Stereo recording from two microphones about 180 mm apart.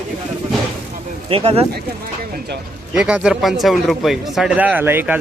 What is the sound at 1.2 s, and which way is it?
Speech, 35° right (ahead or behind).